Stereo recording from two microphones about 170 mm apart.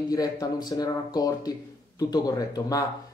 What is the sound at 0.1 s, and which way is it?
Speech, 20° left (ahead or behind).